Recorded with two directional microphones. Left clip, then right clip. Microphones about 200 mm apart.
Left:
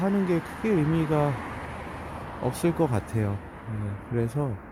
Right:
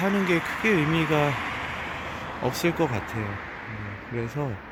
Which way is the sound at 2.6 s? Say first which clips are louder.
Even; 10° left (ahead or behind).